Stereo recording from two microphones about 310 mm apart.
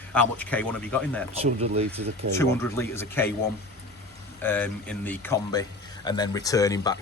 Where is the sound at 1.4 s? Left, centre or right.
Centre.